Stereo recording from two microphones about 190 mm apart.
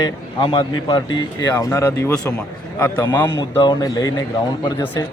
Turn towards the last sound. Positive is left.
turn(degrees=20)  # may be behind; listen again after turning